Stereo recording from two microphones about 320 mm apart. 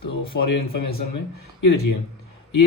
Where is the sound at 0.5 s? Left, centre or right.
Left.